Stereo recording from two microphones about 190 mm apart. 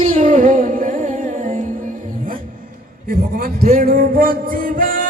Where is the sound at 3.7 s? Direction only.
50° right (ahead or behind).